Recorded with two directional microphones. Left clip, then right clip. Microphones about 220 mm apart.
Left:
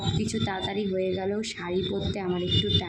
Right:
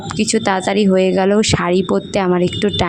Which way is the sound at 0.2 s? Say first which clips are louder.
Right 19 dB; 45° right (ahead or behind).